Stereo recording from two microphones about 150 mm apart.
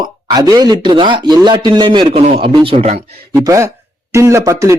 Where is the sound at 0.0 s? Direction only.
25° right (ahead or behind).